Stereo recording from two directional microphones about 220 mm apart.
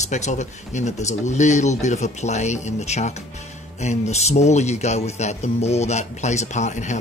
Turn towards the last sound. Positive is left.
turn(degrees=30)  # may be behind; listen again after turning